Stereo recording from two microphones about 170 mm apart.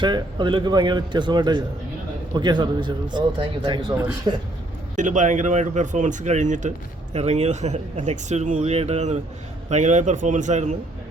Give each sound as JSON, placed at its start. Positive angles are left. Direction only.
{"t": 0.0, "sound": "a man's voice", "side_deg": -25}
{"t": 4.9, "sound": "speech", "side_deg": -45}